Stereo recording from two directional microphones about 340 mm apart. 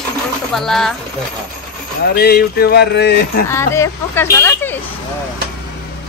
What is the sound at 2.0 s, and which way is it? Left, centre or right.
Speech, left.